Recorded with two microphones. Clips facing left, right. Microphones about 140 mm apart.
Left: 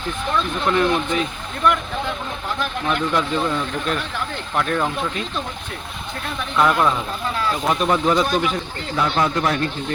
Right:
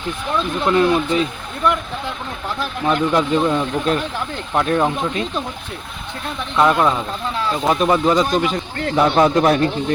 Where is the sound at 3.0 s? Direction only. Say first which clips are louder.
Right 5 dB; 15° right (ahead or behind).